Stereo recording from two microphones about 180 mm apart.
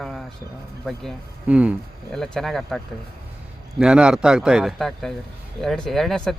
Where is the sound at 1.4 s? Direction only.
10° right (ahead or behind).